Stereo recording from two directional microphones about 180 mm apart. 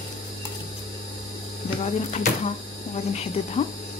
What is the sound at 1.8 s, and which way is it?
Speech, 35° left (ahead or behind).